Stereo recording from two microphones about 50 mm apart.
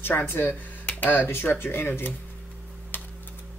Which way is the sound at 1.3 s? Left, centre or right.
Left.